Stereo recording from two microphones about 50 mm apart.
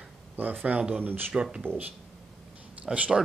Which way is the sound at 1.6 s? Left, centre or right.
Right.